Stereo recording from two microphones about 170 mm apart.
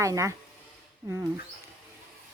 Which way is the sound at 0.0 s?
20° right (ahead or behind).